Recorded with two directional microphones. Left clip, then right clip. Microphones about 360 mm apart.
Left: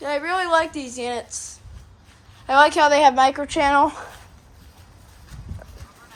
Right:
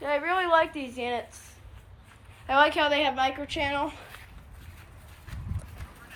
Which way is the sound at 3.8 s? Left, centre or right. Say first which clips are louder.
Left 13 dB; left.